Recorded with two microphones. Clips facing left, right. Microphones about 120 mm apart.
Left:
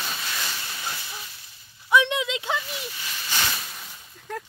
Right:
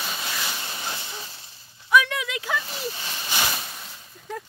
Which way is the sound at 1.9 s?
20° left (ahead or behind).